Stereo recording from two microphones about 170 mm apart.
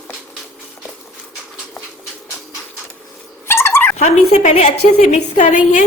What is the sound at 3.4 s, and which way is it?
Dog, 15° left (ahead or behind).